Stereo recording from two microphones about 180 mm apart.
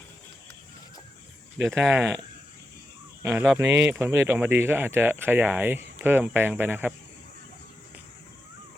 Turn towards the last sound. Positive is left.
turn(degrees=-10)  # may be behind; listen again after turning